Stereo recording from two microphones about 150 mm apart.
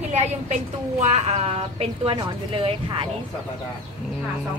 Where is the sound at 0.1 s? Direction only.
45° right (ahead or behind).